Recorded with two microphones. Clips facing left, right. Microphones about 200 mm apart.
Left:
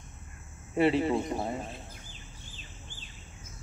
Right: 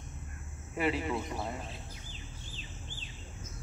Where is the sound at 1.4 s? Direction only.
50° left (ahead or behind).